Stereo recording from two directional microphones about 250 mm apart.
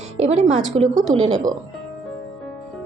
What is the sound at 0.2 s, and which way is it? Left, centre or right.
A woman's voice, right.